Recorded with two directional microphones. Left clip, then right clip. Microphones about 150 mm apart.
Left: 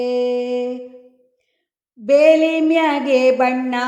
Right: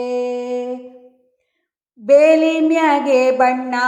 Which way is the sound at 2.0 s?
25° left (ahead or behind).